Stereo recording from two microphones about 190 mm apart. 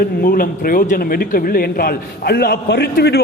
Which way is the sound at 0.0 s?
50° left (ahead or behind).